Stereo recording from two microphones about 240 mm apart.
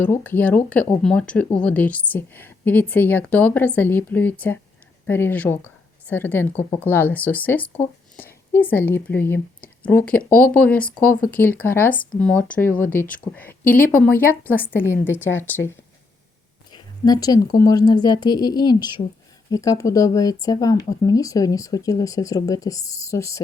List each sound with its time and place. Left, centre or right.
0.0 s a woman's voice: centre
16.7 s speech: centre